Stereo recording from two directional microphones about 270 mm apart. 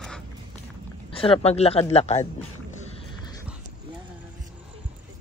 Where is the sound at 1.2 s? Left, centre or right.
Left.